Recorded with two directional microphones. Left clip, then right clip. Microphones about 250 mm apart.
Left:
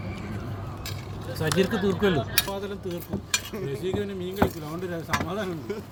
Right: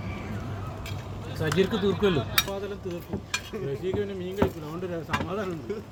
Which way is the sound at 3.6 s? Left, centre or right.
Left.